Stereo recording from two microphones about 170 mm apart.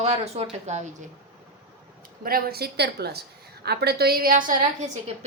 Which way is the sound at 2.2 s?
60° right (ahead or behind).